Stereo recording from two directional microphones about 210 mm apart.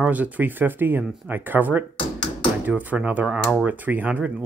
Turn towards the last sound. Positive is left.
turn(degrees=-10)  # may be behind; listen again after turning